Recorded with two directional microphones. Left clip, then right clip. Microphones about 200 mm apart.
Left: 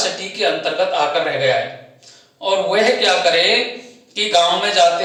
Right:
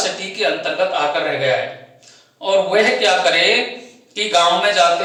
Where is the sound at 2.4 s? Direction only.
Centre (ahead or behind).